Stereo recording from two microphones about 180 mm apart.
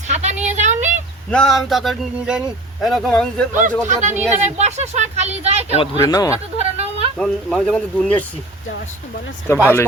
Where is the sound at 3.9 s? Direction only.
40° right (ahead or behind).